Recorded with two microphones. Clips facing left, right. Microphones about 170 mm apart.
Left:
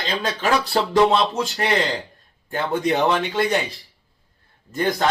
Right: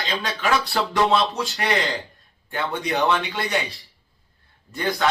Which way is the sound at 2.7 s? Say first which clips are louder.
Left 3 dB; 35° left (ahead or behind).